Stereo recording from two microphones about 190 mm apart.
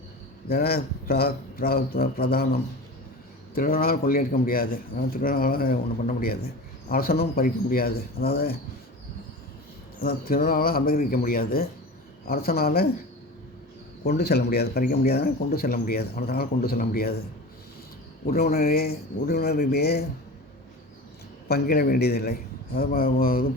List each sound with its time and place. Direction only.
0.4 s a man's voice: 55° left (ahead or behind)
10.0 s a man's voice: 55° left (ahead or behind)
14.0 s a man's voice: 60° left (ahead or behind)
18.3 s speech: 55° left (ahead or behind)
21.4 s a man's voice: 55° left (ahead or behind)